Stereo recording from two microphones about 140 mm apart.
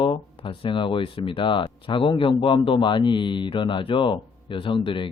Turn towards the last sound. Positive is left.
turn(degrees=35)  # may be behind; listen again after turning